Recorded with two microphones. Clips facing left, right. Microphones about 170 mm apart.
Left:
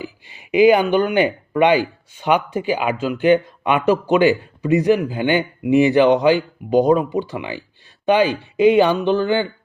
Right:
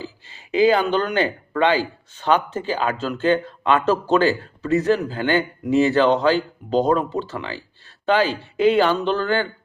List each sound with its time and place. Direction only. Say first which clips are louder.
0.0 s speech: left 3 dB; 15° left (ahead or behind)